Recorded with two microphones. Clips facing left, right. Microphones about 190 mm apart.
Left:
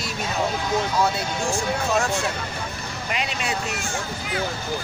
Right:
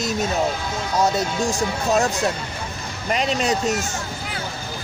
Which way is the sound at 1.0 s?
40° right (ahead or behind).